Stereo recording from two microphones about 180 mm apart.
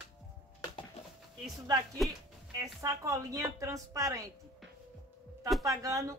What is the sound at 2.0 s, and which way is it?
Speech, centre (ahead or behind).